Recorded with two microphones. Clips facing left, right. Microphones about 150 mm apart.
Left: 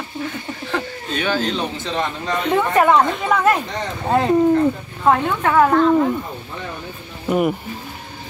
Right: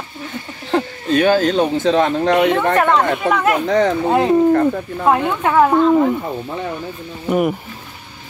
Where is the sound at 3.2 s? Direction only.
5° right (ahead or behind).